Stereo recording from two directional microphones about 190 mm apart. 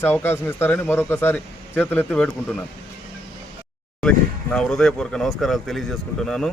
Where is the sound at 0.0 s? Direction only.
10° left (ahead or behind).